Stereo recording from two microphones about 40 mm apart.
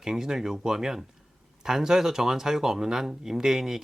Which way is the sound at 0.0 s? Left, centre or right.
Centre.